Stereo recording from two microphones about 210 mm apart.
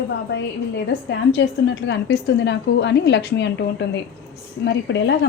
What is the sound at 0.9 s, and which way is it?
A woman's voice, 55° left (ahead or behind).